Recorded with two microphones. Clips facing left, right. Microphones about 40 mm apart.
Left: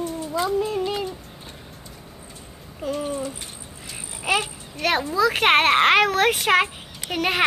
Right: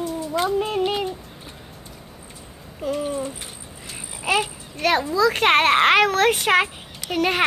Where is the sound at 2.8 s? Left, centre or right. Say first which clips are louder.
Right 2 dB; centre.